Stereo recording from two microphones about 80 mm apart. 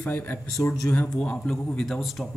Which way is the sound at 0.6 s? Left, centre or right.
Left.